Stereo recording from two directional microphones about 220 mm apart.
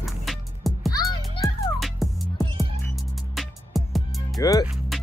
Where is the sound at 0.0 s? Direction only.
Centre (ahead or behind).